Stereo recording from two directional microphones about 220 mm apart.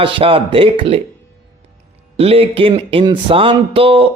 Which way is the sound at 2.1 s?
25° right (ahead or behind).